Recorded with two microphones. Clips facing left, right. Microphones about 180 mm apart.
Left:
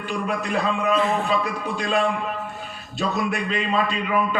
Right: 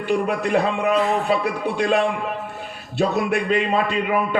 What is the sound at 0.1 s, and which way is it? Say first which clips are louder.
A man's voice: right 6 dB; 60° right (ahead or behind).